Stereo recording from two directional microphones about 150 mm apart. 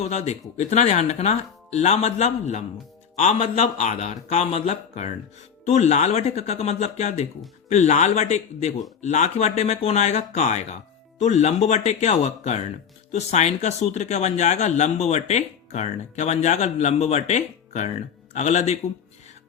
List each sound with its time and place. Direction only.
0.1 s speech: 50° left (ahead or behind)